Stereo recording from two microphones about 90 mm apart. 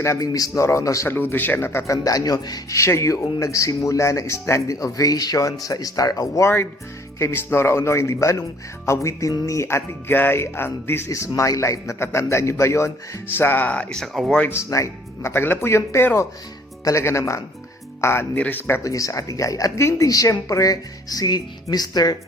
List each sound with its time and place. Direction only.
0.0 s a man's voice: 35° left (ahead or behind)
1.0 s speech: 25° left (ahead or behind)
2.0 s speech: 45° left (ahead or behind)
2.7 s a man's voice: 35° left (ahead or behind)
7.2 s a man's voice: 30° left (ahead or behind)
14.0 s speech: centre (ahead or behind)
14.5 s a man's voice: 35° left (ahead or behind); by 18.8 s 20° left (ahead or behind)
18.8 s a man's voice: 40° left (ahead or behind)